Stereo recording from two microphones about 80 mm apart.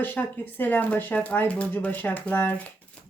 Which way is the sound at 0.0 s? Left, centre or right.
Left.